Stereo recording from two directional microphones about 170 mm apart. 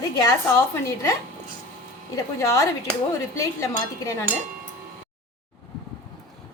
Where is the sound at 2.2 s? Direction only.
20° left (ahead or behind).